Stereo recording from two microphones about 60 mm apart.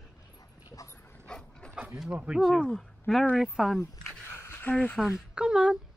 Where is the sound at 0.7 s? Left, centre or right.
Left.